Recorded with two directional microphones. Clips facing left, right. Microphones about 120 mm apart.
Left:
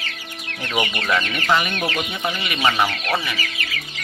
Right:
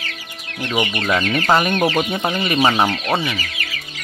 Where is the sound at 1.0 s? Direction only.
25° right (ahead or behind).